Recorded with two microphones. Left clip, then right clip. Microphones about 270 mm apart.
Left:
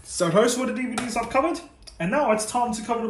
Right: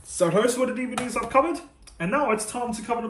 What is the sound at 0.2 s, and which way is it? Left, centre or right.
Speech, centre.